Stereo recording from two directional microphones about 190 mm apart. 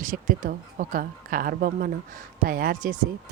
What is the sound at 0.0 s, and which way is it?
Speech, 45° right (ahead or behind).